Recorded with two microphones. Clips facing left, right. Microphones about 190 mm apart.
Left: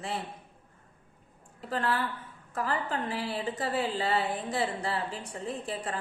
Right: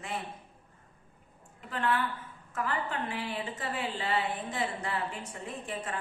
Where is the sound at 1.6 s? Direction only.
35° left (ahead or behind).